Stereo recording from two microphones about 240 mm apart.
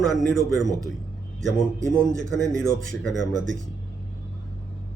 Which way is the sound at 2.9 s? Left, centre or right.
Centre.